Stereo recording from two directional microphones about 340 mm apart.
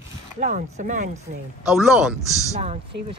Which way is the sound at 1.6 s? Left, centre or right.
Centre.